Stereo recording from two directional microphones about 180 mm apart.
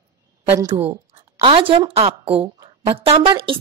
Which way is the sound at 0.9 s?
30° right (ahead or behind).